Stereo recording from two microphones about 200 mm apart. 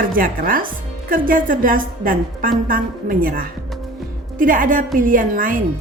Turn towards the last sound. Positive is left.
turn(degrees=-45)  # may be behind; listen again after turning